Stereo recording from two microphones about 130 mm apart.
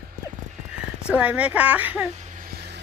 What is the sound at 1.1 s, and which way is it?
Speech, 10° right (ahead or behind).